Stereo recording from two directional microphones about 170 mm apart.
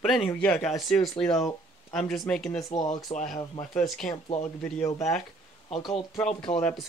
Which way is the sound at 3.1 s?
30° left (ahead or behind).